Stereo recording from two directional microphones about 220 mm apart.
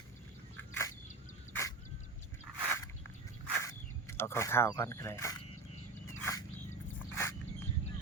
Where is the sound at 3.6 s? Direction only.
10° left (ahead or behind).